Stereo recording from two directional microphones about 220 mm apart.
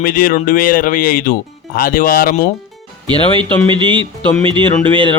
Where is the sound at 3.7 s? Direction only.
20° right (ahead or behind).